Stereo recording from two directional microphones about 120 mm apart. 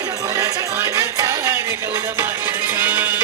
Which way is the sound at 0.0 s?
30° right (ahead or behind).